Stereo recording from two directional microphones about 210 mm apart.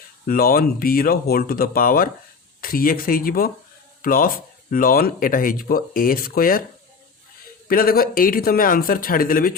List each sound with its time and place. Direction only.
0.3 s speech: 45° left (ahead or behind)
7.7 s speech: 45° left (ahead or behind)